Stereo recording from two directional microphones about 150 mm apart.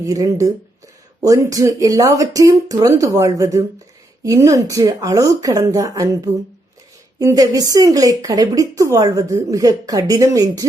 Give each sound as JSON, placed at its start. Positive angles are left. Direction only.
{"t": 0.0, "sound": "speech", "side_deg": -25}